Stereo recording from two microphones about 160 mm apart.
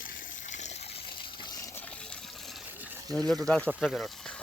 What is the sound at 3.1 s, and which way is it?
Speech, centre (ahead or behind).